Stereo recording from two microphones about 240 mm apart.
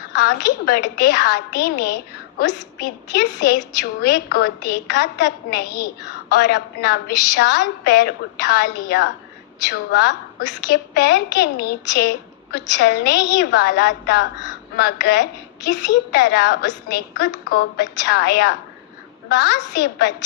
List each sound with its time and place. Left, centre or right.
0.2 s a woman's voice: left